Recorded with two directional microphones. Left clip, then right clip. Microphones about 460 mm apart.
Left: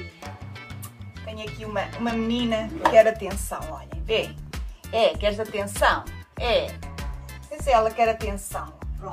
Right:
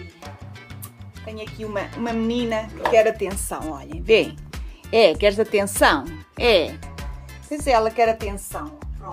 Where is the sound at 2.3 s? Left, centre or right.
Right.